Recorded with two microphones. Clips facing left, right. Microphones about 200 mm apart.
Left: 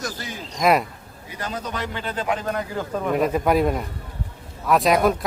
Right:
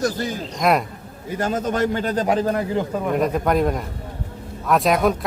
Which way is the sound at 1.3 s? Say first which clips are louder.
Right 8 dB; 45° right (ahead or behind).